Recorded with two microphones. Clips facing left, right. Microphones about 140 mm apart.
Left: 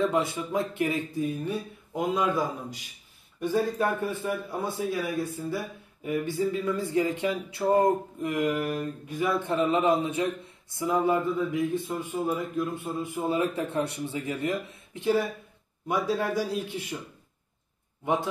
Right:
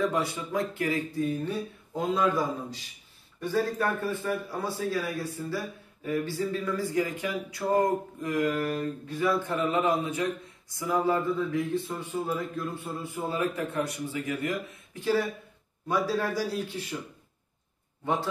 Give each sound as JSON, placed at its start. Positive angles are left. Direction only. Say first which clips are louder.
{"t": 0.0, "sound": "a man's voice", "louder": "left 2 dB", "side_deg": 20}